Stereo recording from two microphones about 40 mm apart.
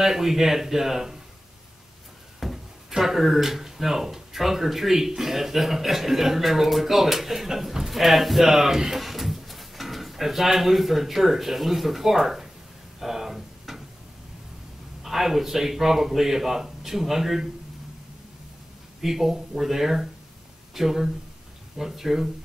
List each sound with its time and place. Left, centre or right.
0.0 s speech: centre
2.5 s speech: centre
13.0 s a sound: centre
15.0 s speech: centre
18.9 s speech: centre